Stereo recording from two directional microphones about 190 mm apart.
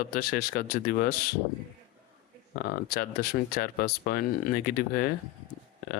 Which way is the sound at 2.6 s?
50° left (ahead or behind).